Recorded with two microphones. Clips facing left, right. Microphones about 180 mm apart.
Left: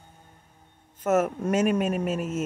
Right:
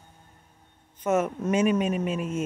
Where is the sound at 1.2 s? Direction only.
5° left (ahead or behind).